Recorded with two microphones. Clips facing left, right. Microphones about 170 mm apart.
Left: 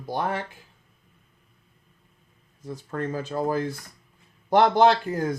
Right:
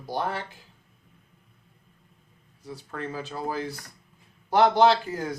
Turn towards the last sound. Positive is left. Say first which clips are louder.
# left 1 dB
turn(degrees=50)  # may be behind; listen again after turning